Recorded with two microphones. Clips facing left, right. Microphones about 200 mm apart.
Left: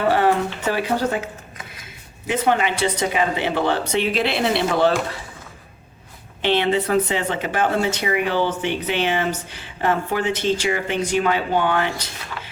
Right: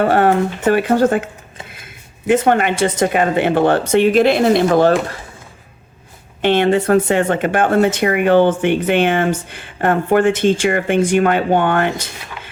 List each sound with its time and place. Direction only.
0.1 s speech: 55° right (ahead or behind)
6.4 s speech: 50° right (ahead or behind)